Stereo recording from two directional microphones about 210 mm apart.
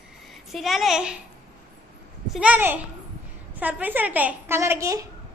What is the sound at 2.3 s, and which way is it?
A woman's voice, 5° right (ahead or behind).